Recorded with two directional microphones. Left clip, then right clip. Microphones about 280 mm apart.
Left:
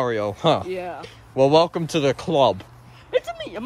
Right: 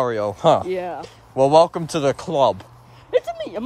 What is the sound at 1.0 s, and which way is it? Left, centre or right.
Speech, centre.